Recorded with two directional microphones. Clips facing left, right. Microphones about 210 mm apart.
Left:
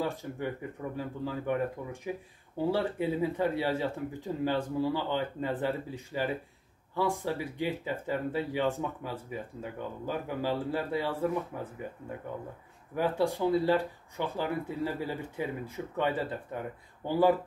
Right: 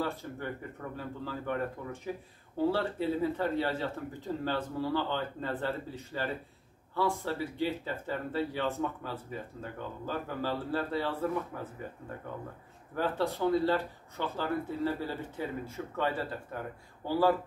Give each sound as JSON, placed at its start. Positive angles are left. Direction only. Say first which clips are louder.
{"t": 0.0, "sound": "speech", "louder": "left 2 dB", "side_deg": 15}
{"t": 12.9, "sound": "speech", "louder": "left 3 dB", "side_deg": 15}